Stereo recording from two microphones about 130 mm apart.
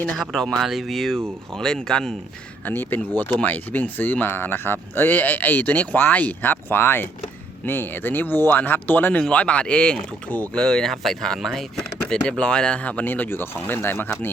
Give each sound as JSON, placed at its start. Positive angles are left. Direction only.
{"t": 0.2, "sound": "speech", "side_deg": 5}